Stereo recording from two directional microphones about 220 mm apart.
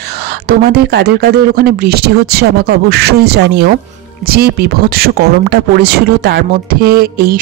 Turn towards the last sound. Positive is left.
turn(degrees=-45)  # may be behind; listen again after turning